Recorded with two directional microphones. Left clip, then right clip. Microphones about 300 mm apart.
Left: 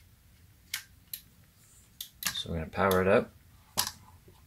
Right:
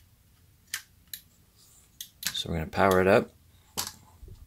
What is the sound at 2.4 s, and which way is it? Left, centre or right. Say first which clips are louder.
Speech: right 5 dB; right.